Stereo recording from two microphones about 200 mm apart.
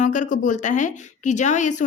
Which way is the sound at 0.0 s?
40° left (ahead or behind).